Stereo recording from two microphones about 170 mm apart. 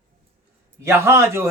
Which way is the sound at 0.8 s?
15° right (ahead or behind).